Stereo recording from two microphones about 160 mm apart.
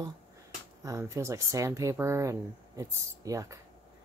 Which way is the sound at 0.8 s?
20° right (ahead or behind).